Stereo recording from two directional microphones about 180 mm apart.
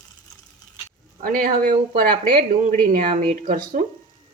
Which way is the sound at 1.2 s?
50° right (ahead or behind).